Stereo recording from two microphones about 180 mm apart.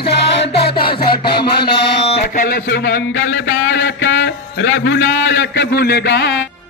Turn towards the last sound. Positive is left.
turn(degrees=65)  # may be behind; listen again after turning